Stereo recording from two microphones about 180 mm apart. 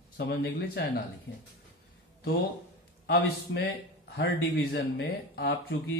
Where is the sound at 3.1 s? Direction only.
65° left (ahead or behind).